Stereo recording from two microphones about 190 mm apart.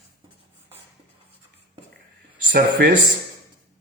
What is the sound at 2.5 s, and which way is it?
Speech, 60° right (ahead or behind).